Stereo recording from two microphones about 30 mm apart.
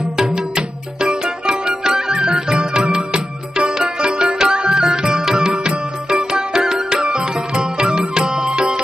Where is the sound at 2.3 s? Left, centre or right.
Right.